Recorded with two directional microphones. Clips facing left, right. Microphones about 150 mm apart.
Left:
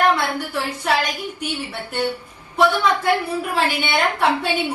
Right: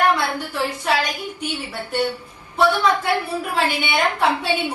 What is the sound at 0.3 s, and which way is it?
Speech, 10° left (ahead or behind).